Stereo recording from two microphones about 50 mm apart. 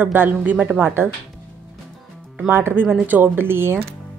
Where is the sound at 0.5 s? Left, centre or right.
Right.